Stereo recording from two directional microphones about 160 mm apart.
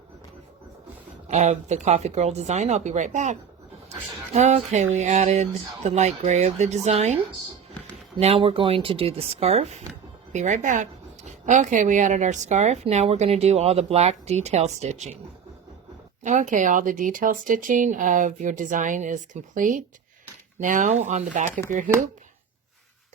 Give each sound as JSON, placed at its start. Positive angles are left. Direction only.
{"t": 1.3, "sound": "a woman's voice", "side_deg": -45}
{"t": 4.4, "sound": "a woman's voice", "side_deg": -45}
{"t": 8.2, "sound": "a woman's voice", "side_deg": -35}
{"t": 16.2, "sound": "a woman's voice", "side_deg": -50}